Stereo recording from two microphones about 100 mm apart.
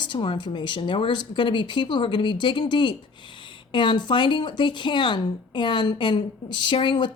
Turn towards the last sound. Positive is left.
turn(degrees=50)  # may be behind; listen again after turning